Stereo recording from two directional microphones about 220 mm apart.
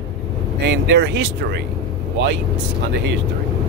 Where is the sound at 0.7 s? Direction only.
55° right (ahead or behind).